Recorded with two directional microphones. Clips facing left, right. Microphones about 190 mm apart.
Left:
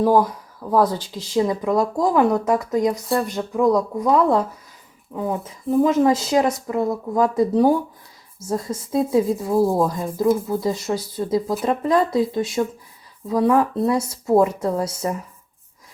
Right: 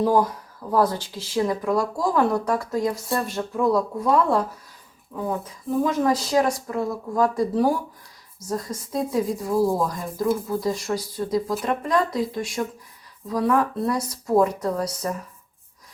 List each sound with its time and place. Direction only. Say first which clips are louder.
0.0 s a woman's voice: left 3 dB; 10° left (ahead or behind)